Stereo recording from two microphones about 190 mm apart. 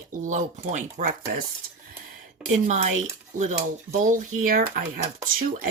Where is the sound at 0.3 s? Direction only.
40° right (ahead or behind).